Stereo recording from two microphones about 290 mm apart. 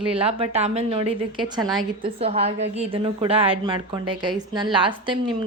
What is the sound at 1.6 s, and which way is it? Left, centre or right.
Speech, centre.